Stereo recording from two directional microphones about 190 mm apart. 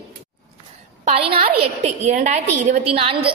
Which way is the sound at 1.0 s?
30° right (ahead or behind).